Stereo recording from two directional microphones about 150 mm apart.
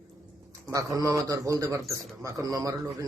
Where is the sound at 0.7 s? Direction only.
20° right (ahead or behind).